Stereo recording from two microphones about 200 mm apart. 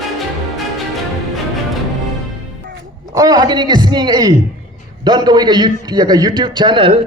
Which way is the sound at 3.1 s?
20° right (ahead or behind).